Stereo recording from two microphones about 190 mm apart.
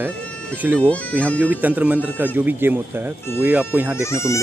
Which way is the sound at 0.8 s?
5° left (ahead or behind).